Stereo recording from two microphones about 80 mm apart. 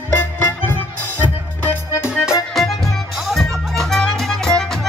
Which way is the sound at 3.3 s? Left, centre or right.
Centre.